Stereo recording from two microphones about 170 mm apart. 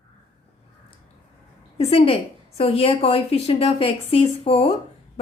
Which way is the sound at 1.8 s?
35° left (ahead or behind).